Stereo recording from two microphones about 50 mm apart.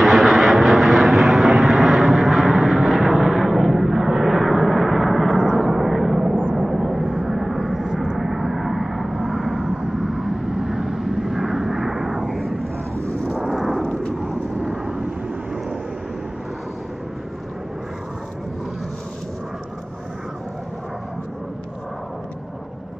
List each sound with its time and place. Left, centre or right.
0.0 s vehicle: centre
13.2 s a sound: centre
14.2 s vehicle: centre
14.9 s vehicle: centre